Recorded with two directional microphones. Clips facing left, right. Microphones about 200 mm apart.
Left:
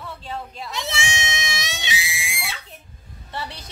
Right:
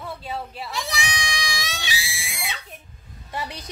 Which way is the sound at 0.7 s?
25° left (ahead or behind).